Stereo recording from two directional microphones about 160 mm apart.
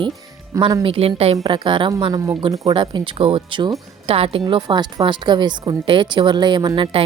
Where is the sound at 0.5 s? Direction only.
25° right (ahead or behind).